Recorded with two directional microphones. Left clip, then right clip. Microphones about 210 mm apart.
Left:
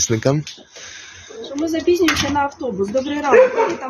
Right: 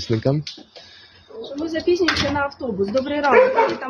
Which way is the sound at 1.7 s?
35° left (ahead or behind).